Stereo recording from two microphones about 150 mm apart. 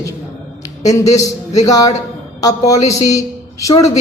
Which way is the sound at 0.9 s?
20° left (ahead or behind).